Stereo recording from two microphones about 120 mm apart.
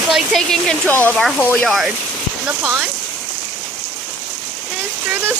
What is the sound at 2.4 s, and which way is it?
Speech, 20° right (ahead or behind).